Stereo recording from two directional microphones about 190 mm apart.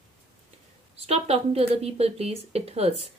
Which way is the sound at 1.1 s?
30° right (ahead or behind).